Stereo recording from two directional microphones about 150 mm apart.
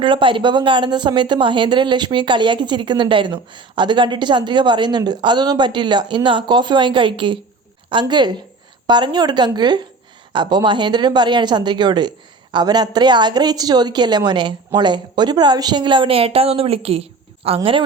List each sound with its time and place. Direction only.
0.0 s a woman's voice: 35° right (ahead or behind)